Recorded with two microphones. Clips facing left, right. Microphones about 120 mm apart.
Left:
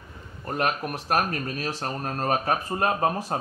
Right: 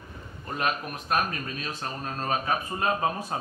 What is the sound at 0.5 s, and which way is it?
Speech, 60° left (ahead or behind).